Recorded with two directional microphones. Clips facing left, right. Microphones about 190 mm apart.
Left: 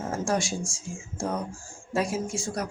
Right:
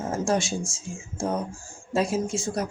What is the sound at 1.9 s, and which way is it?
Speech, 25° right (ahead or behind).